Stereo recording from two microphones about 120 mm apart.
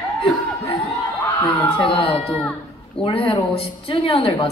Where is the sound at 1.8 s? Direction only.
45° left (ahead or behind).